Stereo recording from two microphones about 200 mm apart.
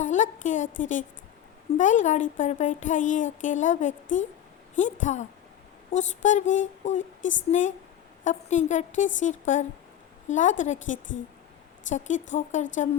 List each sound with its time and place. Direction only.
0.0 s a woman's voice: 40° left (ahead or behind)